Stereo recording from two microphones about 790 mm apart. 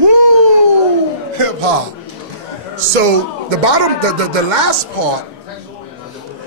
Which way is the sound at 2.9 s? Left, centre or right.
Right.